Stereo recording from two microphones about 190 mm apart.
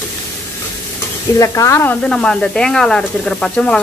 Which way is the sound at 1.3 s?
15° left (ahead or behind).